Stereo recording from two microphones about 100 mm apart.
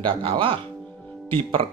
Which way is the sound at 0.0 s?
65° right (ahead or behind).